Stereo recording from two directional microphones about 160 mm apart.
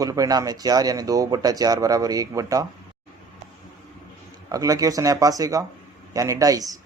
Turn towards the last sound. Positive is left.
turn(degrees=-20)  # may be behind; listen again after turning